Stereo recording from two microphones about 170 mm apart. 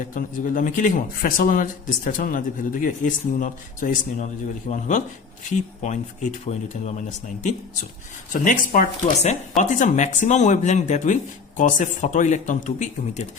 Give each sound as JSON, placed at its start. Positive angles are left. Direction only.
{"t": 0.1, "sound": "speech", "side_deg": 55}
{"t": 8.3, "sound": "speech", "side_deg": 50}